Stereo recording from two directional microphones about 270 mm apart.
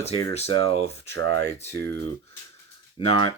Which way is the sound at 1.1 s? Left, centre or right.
Right.